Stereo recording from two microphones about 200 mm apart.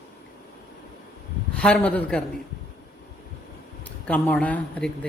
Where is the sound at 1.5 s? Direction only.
5° left (ahead or behind).